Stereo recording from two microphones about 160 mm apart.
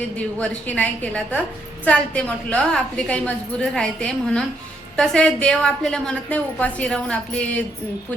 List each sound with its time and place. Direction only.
0.3 s a woman's voice: 5° left (ahead or behind)